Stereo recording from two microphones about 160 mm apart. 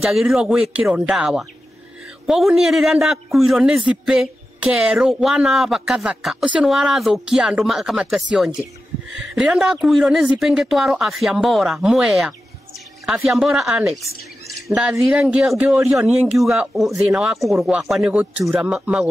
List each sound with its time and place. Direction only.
0.0 s a man's voice: centre (ahead or behind)